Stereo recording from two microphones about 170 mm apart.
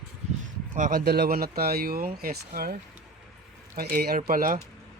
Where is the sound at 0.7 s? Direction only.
50° right (ahead or behind).